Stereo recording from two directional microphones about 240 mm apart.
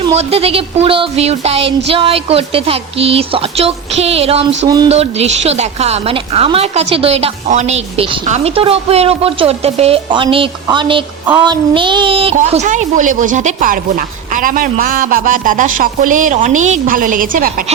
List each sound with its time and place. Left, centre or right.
0.1 s a man's voice: right